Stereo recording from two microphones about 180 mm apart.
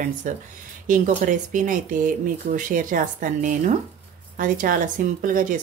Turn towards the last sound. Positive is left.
turn(degrees=-50)  # may be behind; listen again after turning